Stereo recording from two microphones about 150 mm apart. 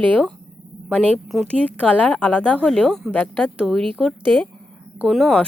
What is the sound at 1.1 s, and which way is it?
Speech, centre (ahead or behind).